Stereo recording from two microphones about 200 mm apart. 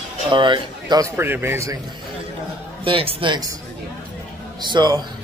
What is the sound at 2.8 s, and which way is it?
Speech, 25° right (ahead or behind).